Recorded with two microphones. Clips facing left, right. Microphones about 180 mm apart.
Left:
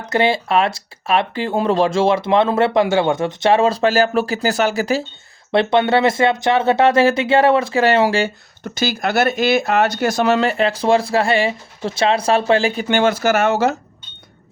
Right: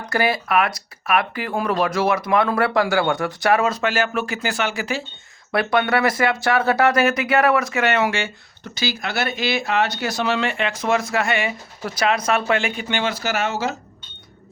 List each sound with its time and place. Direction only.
0.0 s speech: 25° left (ahead or behind)
5.5 s speech: 25° left (ahead or behind)
8.6 s speech: 45° left (ahead or behind)
12.9 s speech: 50° left (ahead or behind)